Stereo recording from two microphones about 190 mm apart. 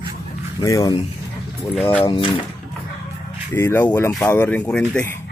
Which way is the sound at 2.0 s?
25° left (ahead or behind).